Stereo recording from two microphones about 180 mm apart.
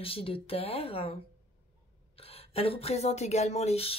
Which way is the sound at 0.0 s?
30° left (ahead or behind).